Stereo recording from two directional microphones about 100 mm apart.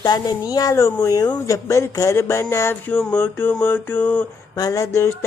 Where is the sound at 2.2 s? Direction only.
25° left (ahead or behind).